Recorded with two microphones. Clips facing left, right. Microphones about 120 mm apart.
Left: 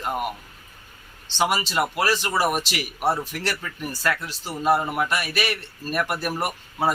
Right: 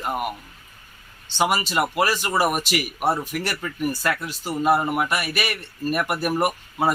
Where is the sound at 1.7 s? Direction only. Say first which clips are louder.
Right 1 dB; 5° right (ahead or behind).